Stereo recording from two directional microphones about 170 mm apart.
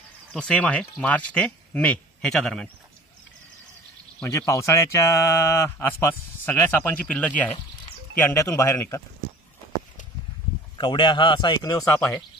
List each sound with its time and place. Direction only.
0.3 s speech: 5° left (ahead or behind)
4.2 s speech: 15° left (ahead or behind)
10.8 s speech: 30° left (ahead or behind)